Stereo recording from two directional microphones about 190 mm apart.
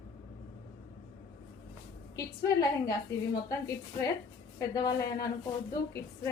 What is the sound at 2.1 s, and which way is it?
A woman's voice, 20° left (ahead or behind).